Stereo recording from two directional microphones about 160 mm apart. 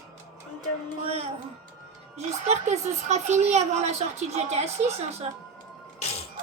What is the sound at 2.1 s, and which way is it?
Speech, 45° right (ahead or behind).